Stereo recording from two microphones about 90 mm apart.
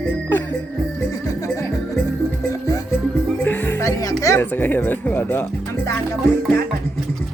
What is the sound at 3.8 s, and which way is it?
Music, 40° left (ahead or behind).